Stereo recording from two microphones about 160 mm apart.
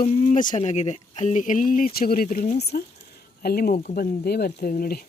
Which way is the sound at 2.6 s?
90° left.